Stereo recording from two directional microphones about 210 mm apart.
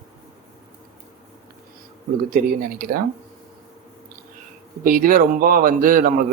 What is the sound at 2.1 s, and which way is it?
Speech, 45° right (ahead or behind).